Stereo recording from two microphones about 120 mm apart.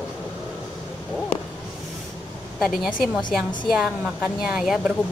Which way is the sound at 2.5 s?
Centre (ahead or behind).